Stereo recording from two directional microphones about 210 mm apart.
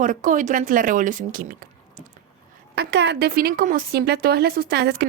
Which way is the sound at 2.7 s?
50° right (ahead or behind).